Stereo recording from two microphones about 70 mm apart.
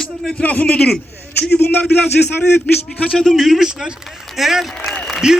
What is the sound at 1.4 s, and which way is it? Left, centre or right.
Speech, left.